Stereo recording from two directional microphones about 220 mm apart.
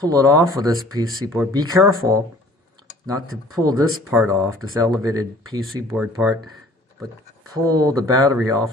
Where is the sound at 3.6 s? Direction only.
15° right (ahead or behind).